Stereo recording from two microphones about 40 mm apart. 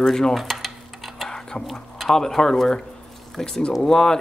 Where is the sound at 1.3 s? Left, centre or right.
Centre.